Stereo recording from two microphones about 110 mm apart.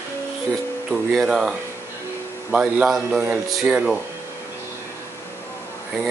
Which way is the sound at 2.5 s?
10° right (ahead or behind).